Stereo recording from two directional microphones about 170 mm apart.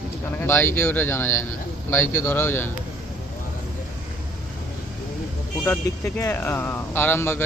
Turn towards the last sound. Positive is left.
turn(degrees=15)  # may be behind; listen again after turning